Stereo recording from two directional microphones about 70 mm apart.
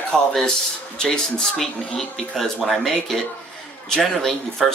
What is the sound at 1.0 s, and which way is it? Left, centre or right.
Speech, centre.